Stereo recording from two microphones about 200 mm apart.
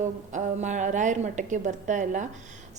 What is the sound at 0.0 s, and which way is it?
A woman's voice, 35° right (ahead or behind).